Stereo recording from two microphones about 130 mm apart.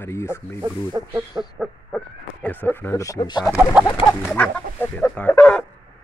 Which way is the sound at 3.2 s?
35° left (ahead or behind).